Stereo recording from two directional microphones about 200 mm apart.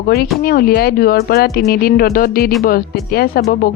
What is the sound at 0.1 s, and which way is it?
Speech, 50° left (ahead or behind).